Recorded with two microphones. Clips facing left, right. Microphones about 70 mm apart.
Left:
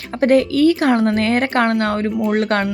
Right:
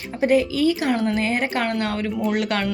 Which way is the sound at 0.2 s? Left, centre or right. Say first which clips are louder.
Left 5 dB; left.